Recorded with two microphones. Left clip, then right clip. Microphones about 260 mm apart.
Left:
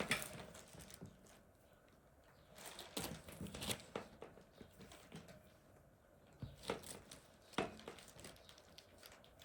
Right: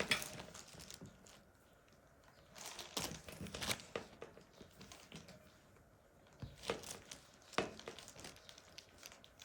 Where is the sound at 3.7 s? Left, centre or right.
Right.